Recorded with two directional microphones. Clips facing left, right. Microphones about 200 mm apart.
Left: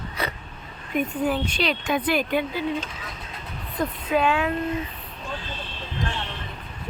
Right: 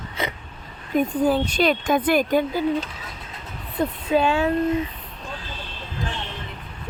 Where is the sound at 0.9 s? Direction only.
35° right (ahead or behind).